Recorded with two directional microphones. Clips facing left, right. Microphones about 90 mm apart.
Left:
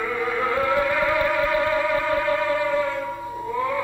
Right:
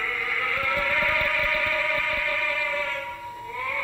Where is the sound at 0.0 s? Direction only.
30° left (ahead or behind).